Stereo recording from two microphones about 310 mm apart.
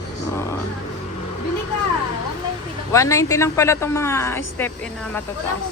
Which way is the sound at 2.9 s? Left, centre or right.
Centre.